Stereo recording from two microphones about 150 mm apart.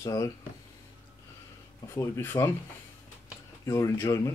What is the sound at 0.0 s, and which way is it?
Speech, 20° left (ahead or behind).